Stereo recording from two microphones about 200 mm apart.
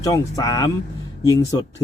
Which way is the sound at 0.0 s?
15° left (ahead or behind).